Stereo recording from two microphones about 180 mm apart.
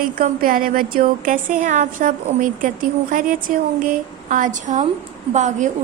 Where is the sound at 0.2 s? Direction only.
50° right (ahead or behind).